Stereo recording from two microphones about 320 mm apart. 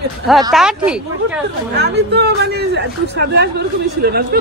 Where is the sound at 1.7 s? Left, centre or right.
Right.